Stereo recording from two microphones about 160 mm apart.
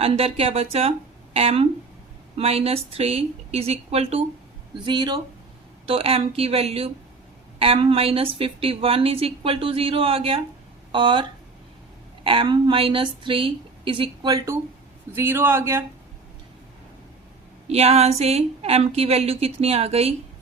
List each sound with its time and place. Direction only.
0.0 s a woman's voice: 40° right (ahead or behind)
4.8 s a woman's voice: 30° right (ahead or behind)
17.7 s a woman's voice: 40° right (ahead or behind)